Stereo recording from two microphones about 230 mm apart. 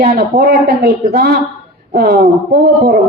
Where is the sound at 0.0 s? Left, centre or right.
Right.